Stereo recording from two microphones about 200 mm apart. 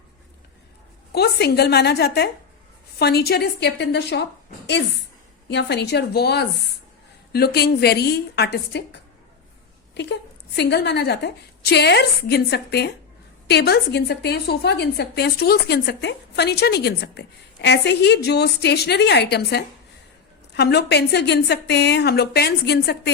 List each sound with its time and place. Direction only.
1.1 s a woman's voice: 55° left (ahead or behind)